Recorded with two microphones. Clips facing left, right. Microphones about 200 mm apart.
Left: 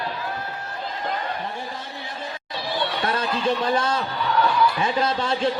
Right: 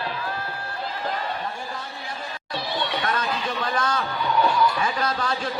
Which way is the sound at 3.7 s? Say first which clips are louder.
Left 2 dB; 25° left (ahead or behind).